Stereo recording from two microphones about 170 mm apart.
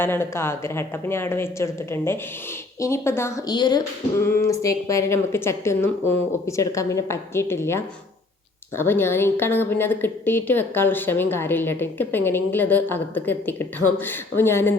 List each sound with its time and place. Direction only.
0.0 s a woman's voice: 15° left (ahead or behind)